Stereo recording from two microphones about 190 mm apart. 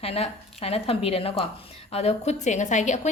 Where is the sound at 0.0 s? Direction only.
30° left (ahead or behind).